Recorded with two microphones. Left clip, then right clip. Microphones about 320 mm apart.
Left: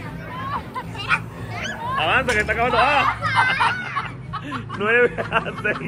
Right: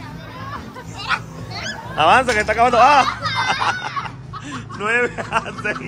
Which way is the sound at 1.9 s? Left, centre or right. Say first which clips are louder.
Right 6 dB; centre.